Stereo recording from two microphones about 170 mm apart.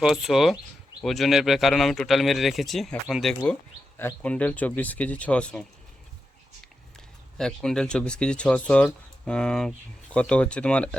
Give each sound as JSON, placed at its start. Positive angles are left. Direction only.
{"t": 0.0, "sound": "speech", "side_deg": 0}
{"t": 7.3, "sound": "speech", "side_deg": 5}